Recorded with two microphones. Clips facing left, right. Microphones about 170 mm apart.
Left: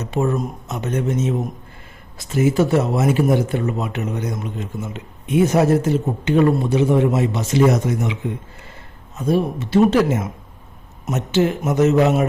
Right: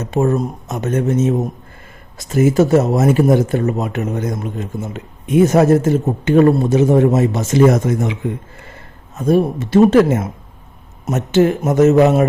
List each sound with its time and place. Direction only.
0.0 s speech: 45° right (ahead or behind)
9.1 s speech: 50° right (ahead or behind)